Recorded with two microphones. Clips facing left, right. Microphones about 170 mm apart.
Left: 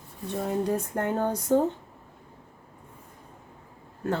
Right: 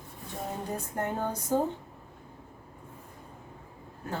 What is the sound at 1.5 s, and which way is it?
Speech, 75° left (ahead or behind).